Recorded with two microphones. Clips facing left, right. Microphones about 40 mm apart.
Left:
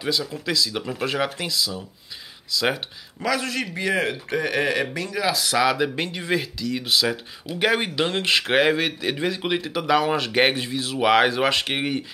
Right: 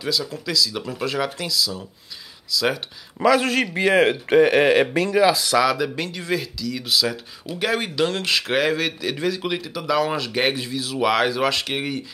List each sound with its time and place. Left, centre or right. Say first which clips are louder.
0.3 s speech: right 1 dB; left
3.3 s speech: right 6 dB; right
5.2 s speech: right 4 dB; centre
5.6 s speech: right 1 dB; left